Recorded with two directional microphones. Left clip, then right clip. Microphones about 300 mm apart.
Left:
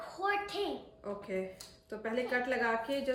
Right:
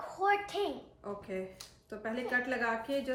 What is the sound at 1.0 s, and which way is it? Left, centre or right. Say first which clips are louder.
A woman's voice: left 2 dB; centre.